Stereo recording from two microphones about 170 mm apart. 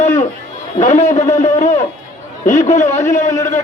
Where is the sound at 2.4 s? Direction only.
45° left (ahead or behind).